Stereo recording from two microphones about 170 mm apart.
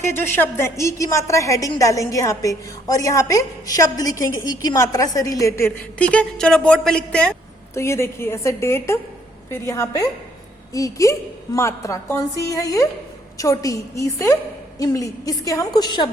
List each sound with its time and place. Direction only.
0.0 s a woman's voice: 15° left (ahead or behind)